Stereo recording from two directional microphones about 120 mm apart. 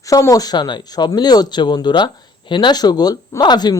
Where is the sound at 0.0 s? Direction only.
30° left (ahead or behind).